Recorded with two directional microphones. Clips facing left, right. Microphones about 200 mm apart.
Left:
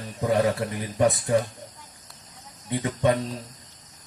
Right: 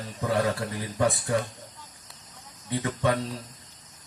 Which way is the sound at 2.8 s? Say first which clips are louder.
Left 4 dB; 20° left (ahead or behind).